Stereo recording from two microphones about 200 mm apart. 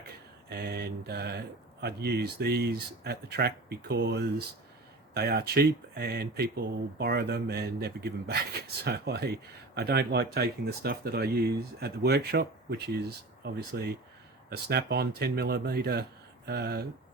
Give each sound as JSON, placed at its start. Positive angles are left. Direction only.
{"t": 0.5, "sound": "speech", "side_deg": -55}